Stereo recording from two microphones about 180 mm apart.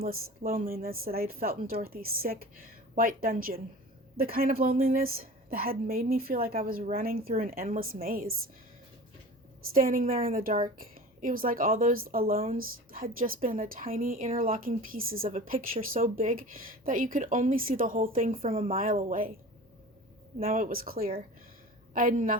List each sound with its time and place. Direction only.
0.0 s speech: 55° right (ahead or behind)
9.7 s speech: 50° right (ahead or behind)
20.4 s speech: 50° right (ahead or behind)